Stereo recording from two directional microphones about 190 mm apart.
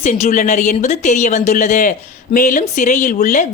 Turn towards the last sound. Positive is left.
turn(degrees=40)  # may be behind; listen again after turning